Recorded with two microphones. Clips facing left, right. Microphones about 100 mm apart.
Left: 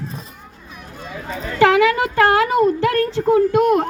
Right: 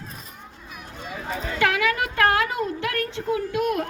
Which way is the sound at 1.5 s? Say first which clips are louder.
Left 9 dB; 35° left (ahead or behind).